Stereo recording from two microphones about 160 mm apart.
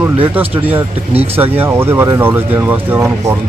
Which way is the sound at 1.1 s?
40° right (ahead or behind).